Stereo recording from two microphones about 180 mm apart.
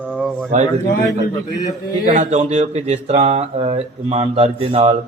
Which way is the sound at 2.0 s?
45° right (ahead or behind).